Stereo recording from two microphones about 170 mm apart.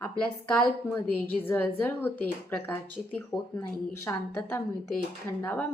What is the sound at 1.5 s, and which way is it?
A woman's voice, 10° left (ahead or behind).